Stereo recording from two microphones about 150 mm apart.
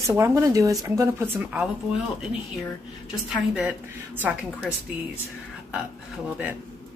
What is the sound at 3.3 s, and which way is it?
Speech, 5° right (ahead or behind).